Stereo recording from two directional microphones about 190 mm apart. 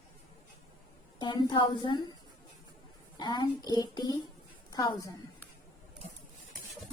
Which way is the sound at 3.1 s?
25° left (ahead or behind).